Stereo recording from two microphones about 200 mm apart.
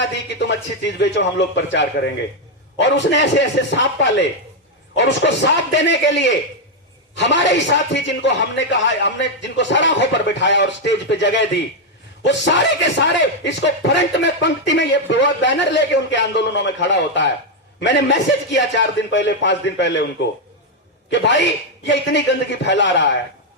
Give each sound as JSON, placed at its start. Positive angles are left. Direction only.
{"t": 0.0, "sound": "speech", "side_deg": 60}